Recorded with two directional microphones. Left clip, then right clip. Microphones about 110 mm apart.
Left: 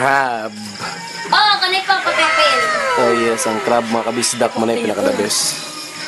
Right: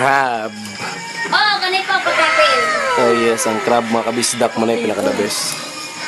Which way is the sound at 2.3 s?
Centre (ahead or behind).